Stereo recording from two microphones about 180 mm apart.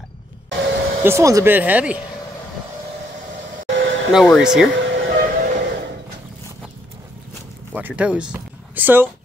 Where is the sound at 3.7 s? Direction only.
90° right.